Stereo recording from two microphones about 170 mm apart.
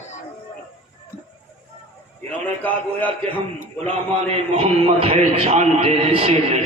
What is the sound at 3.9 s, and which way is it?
A man's voice, 35° right (ahead or behind).